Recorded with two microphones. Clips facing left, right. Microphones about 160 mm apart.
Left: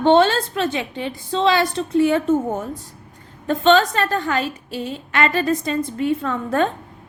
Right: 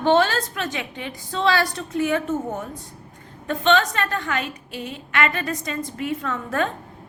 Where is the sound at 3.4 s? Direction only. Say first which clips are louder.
Left 4 dB; 35° left (ahead or behind).